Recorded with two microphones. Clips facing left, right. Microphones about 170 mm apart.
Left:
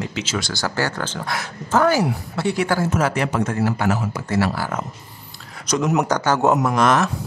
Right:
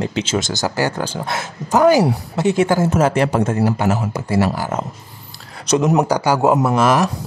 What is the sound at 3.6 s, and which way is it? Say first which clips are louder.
Speech: right 3 dB; 20° right (ahead or behind).